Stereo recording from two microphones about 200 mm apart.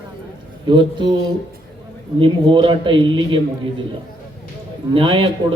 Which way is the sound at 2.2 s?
25° right (ahead or behind).